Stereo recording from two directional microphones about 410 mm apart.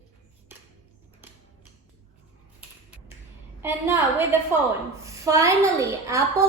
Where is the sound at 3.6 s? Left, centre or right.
Centre.